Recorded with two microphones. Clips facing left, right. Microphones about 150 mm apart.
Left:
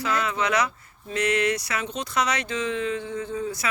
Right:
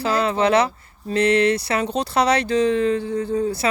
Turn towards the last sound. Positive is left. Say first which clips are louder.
# right 7 dB
turn(degrees=-35)  # may be behind; listen again after turning